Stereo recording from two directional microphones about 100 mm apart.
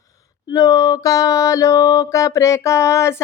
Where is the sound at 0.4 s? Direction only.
35° left (ahead or behind).